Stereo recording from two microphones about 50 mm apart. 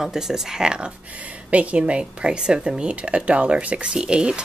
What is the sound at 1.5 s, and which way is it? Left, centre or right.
Speech, right.